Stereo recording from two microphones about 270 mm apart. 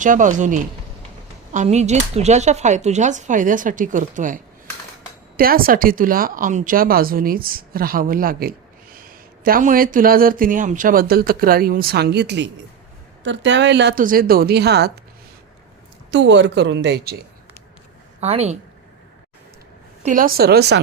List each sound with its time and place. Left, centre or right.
0.0 s speech: right
5.4 s speech: right
16.1 s speech: right
18.2 s speech: right
20.0 s speech: right